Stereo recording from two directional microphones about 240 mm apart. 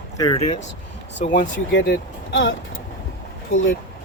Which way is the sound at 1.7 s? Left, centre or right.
Left.